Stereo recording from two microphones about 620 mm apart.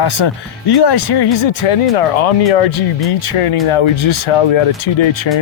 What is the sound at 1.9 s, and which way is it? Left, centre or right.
Speech, left.